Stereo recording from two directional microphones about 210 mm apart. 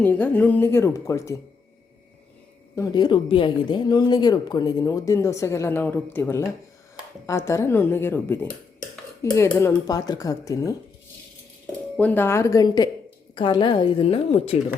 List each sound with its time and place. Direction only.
0.0 s speech: 10° left (ahead or behind)
2.7 s speech: 15° left (ahead or behind)
11.9 s a woman's voice: 10° left (ahead or behind); by 14.6 s 30° left (ahead or behind)